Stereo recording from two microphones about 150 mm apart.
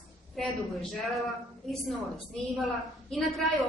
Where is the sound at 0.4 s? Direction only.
Centre (ahead or behind).